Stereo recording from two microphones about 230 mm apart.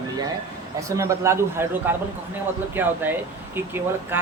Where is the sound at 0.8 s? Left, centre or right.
Centre.